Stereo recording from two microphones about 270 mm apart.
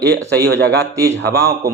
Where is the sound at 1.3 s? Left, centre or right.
Right.